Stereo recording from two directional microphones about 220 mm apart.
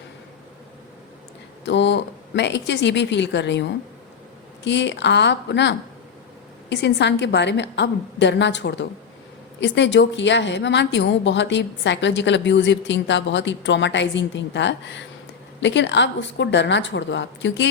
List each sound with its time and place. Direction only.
1.6 s a woman's voice: 55° left (ahead or behind)